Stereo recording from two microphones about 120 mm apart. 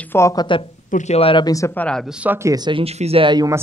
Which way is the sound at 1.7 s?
10° left (ahead or behind).